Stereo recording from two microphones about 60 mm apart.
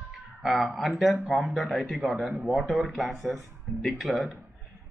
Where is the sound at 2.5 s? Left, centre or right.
Centre.